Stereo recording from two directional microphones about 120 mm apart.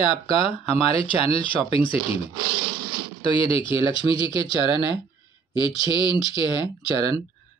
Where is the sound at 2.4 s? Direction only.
45° right (ahead or behind).